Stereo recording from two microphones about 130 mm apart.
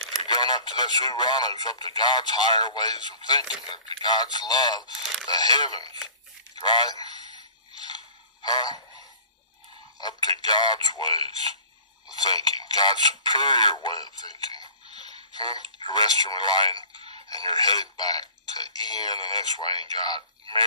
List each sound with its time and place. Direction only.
0.2 s speech: 35° left (ahead or behind)
3.4 s speech: 5° right (ahead or behind)
4.0 s speech: 35° left (ahead or behind)
4.9 s speech: centre (ahead or behind)
5.2 s speech: 30° left (ahead or behind)
6.6 s a sound: 35° left (ahead or behind)
8.4 s speech: 35° left (ahead or behind)
9.9 s speech: 30° left (ahead or behind)
12.2 s speech: 30° left (ahead or behind)